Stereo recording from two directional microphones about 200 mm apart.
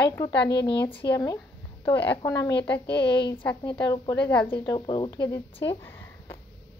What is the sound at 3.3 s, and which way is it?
Speech, 10° left (ahead or behind).